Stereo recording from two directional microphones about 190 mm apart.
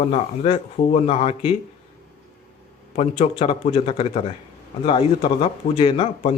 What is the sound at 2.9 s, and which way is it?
A man's voice, 35° left (ahead or behind).